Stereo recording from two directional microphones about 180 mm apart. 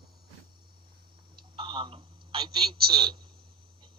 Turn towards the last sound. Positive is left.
turn(degrees=-25)  # may be behind; listen again after turning